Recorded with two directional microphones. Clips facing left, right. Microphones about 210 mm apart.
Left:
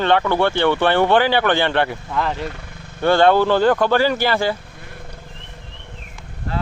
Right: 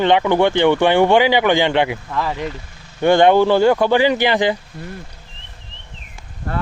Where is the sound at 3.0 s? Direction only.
15° right (ahead or behind).